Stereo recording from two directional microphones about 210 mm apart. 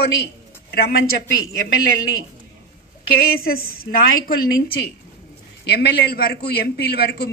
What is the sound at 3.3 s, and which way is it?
Speech, 45° left (ahead or behind).